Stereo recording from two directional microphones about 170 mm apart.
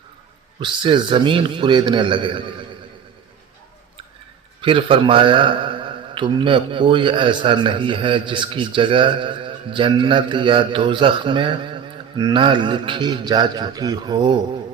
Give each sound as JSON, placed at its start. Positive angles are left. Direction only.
{"t": 0.6, "sound": "a man's voice", "side_deg": -30}
{"t": 4.6, "sound": "a man's voice", "side_deg": -30}